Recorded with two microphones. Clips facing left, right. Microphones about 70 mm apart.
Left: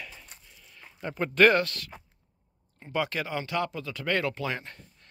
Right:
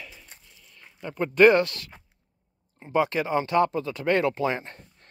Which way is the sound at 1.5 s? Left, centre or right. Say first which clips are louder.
Right 4 dB; right.